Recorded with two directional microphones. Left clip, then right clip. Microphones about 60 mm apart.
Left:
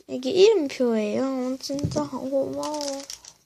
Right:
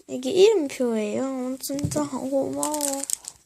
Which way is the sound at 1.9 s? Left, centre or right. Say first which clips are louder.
Right 2 dB; right.